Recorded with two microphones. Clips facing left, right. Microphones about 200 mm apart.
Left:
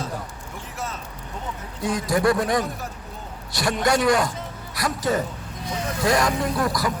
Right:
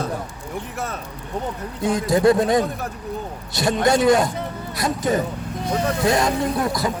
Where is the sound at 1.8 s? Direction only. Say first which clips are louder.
Right 4 dB; 25° right (ahead or behind).